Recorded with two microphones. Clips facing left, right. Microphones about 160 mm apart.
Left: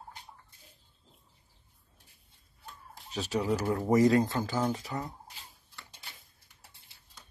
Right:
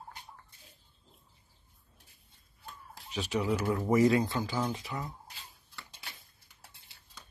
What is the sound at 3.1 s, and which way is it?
Speech, 35° left (ahead or behind).